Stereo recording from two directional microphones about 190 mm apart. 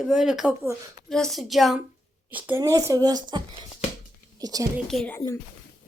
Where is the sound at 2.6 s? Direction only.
15° right (ahead or behind).